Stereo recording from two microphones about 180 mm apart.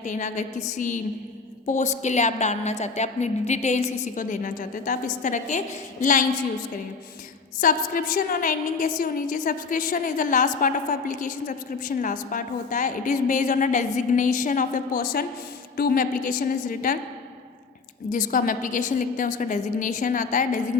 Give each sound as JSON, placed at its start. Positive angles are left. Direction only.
{"t": 0.0, "sound": "a woman's voice", "side_deg": 45}
{"t": 1.6, "sound": "a woman's voice", "side_deg": 40}
{"t": 7.6, "sound": "a woman's voice", "side_deg": 50}
{"t": 18.1, "sound": "a woman's voice", "side_deg": 50}